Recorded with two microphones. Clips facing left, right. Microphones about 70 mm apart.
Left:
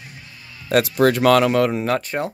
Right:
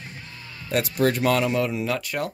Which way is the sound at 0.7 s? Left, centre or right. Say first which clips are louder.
Left 6 dB; left.